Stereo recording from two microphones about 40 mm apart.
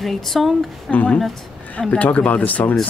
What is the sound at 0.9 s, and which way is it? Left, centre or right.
A man's voice, left.